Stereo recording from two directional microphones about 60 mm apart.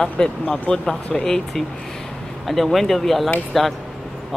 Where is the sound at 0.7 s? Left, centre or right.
Left.